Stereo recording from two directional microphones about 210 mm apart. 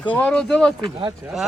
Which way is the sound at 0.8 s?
20° right (ahead or behind).